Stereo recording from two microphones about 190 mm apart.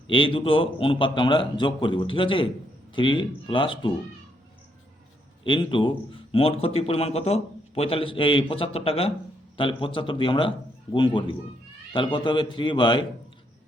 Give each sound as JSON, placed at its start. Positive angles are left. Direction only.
{"t": 0.1, "sound": "speech", "side_deg": 25}
{"t": 5.4, "sound": "speech", "side_deg": 25}